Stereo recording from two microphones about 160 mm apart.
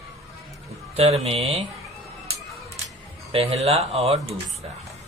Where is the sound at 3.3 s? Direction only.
40° right (ahead or behind).